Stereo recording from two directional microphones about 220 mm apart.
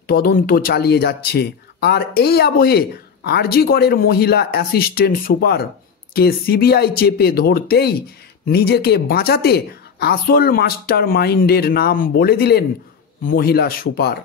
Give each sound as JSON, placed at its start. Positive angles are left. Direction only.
{"t": 0.0, "sound": "a woman's voice", "side_deg": 40}